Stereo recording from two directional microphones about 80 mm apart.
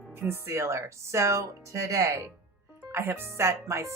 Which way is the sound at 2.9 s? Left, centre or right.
Right.